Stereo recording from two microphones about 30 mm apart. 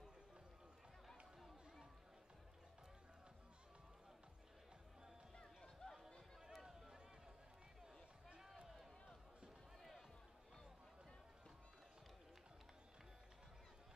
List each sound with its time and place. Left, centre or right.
1.0 s a sound: centre
5.3 s run: left
6.5 s run: centre